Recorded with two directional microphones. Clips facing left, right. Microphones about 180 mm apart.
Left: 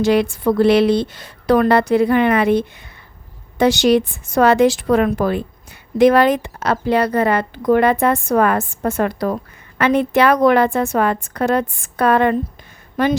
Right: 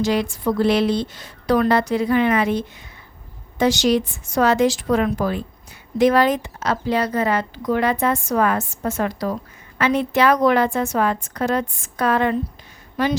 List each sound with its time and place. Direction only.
0.0 s a woman's voice: 60° left (ahead or behind)